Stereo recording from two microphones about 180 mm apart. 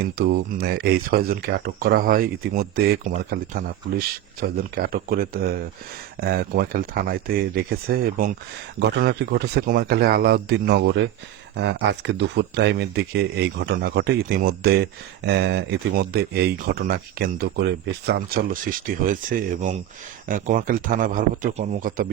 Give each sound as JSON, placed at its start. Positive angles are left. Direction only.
{"t": 0.0, "sound": "speech", "side_deg": -65}
{"t": 8.8, "sound": "a man's voice", "side_deg": -65}